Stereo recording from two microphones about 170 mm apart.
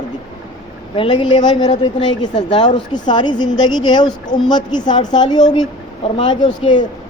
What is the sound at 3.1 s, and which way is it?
Speech, 25° left (ahead or behind).